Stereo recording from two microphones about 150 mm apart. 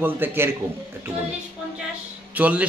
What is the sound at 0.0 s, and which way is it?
Speech, 15° right (ahead or behind).